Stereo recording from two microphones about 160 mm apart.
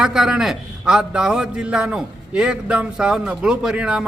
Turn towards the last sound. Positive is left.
turn(degrees=-5)  # may be behind; listen again after turning